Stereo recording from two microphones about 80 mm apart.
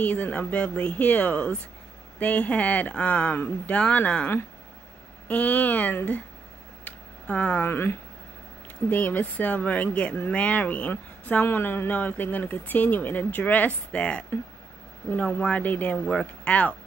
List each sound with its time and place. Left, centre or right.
0.0 s speech: centre
5.3 s speech: centre
6.8 s a sound: centre
7.7 s speech: left
8.9 s speech: left
15.3 s speech: centre
16.1 s speech: centre